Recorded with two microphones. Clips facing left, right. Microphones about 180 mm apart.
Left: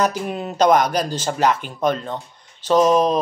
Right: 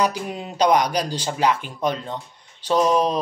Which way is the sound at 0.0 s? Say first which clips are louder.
Left 2 dB; 50° left (ahead or behind).